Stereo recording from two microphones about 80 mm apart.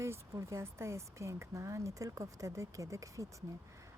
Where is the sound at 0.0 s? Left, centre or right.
Right.